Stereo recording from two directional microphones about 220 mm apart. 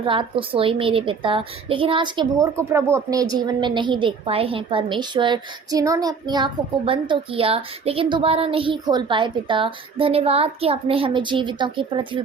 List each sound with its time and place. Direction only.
0.0 s a woman's voice: 25° right (ahead or behind)